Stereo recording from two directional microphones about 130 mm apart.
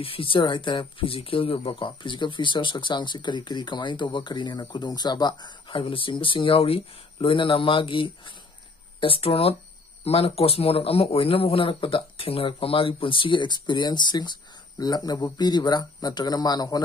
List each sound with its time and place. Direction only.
0.0 s speech: 45° left (ahead or behind)